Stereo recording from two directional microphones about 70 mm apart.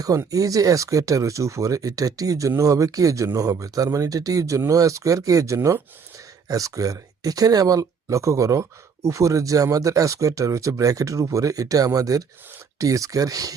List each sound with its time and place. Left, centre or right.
0.3 s speech: right
6.5 s speech: right